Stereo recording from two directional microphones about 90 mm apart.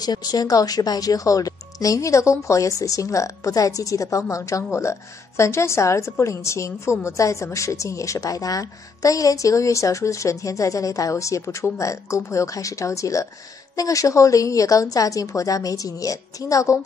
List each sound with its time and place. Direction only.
0.0 s a woman's voice: 45° left (ahead or behind)